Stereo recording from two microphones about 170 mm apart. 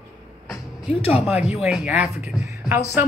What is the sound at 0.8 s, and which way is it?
Speech, 35° left (ahead or behind).